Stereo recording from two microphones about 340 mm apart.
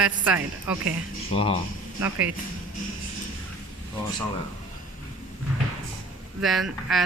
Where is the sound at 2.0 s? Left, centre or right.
Centre.